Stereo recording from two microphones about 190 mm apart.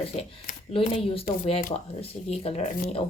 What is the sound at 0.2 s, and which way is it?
Speech, 30° left (ahead or behind).